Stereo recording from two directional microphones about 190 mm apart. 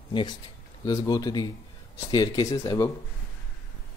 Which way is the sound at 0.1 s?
25° left (ahead or behind).